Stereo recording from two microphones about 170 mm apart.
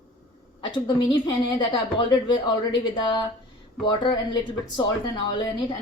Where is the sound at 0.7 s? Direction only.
25° left (ahead or behind).